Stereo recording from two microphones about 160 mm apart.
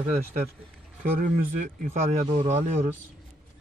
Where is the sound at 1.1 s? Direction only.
50° right (ahead or behind).